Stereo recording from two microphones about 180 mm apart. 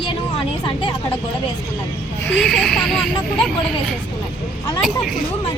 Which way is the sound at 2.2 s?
5° left (ahead or behind).